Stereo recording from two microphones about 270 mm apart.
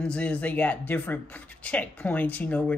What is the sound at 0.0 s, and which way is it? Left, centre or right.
Speech, centre.